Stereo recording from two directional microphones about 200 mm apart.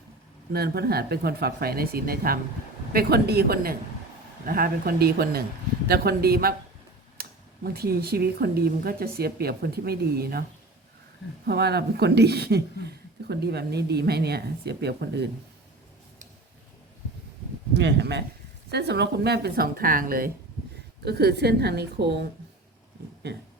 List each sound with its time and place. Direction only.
0.5 s speech: 50° right (ahead or behind)
11.4 s speech: 55° right (ahead or behind)
17.7 s speech: 60° right (ahead or behind)